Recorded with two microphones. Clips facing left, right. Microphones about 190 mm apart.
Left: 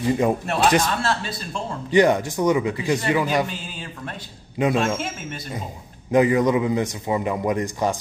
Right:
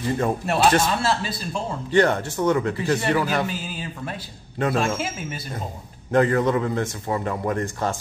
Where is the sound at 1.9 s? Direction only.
15° left (ahead or behind).